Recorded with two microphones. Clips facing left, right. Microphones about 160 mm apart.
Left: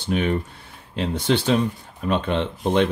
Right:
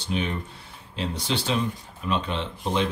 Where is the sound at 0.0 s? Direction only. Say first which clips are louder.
Left 6 dB; 55° left (ahead or behind).